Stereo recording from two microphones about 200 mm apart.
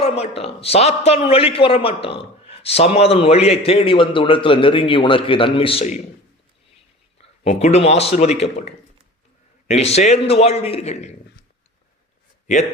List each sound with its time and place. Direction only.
0.0 s a man's voice: 30° left (ahead or behind)
7.2 s speech: 30° left (ahead or behind)